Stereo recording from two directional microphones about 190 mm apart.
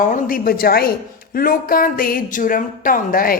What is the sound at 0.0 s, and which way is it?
Speech, 45° left (ahead or behind).